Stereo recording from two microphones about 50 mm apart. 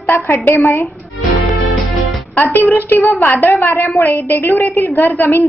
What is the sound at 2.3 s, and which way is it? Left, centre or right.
A woman's voice, left.